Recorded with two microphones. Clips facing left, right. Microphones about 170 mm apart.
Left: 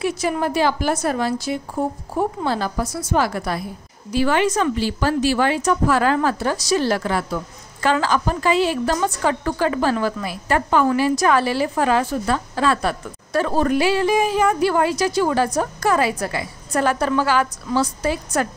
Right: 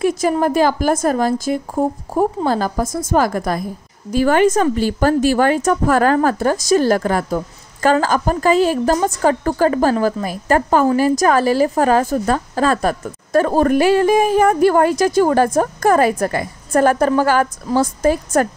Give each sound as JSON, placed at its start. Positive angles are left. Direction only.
{"t": 0.2, "sound": "a woman's voice", "side_deg": -45}